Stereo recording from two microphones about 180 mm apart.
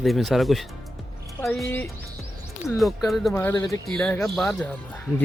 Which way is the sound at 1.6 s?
10° left (ahead or behind).